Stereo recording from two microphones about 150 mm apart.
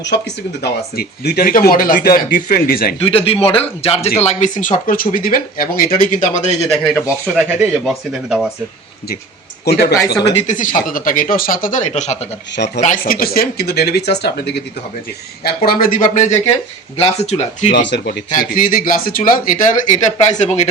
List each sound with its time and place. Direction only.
0.6 s speech: 90° left
3.0 s speech: 40° left (ahead or behind); by 4.7 s 55° left (ahead or behind)
4.9 s speech: 70° left (ahead or behind); by 6.6 s 55° left (ahead or behind)
6.8 s speech: 20° left (ahead or behind)
7.3 s speech: 5° right (ahead or behind)
9.7 s speech: 90° left
10.3 s speech: 55° left (ahead or behind)
12.8 s speech: 65° left (ahead or behind); by 20.7 s 50° left (ahead or behind)